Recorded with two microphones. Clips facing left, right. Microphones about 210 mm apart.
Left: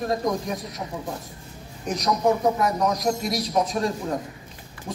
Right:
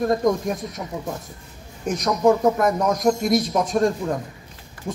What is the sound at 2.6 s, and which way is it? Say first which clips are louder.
Speech: right 4 dB; 50° right (ahead or behind).